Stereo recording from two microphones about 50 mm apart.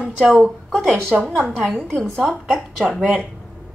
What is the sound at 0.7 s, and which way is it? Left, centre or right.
Speech, centre.